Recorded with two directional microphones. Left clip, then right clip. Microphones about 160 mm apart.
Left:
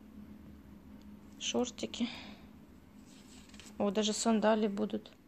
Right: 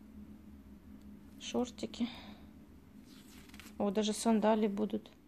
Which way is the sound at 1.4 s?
5° right (ahead or behind).